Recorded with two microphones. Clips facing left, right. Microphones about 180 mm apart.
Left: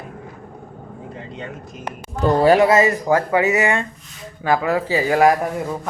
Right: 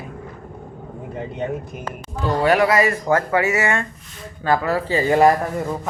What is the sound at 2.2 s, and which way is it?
Speech, 30° left (ahead or behind).